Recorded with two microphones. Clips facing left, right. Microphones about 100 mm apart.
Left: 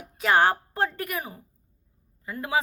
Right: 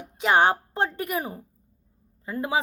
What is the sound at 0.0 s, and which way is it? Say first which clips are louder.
A woman's voice: right 1 dB; 20° right (ahead or behind).